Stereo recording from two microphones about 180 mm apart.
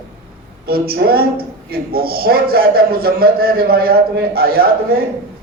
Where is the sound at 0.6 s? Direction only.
60° right (ahead or behind).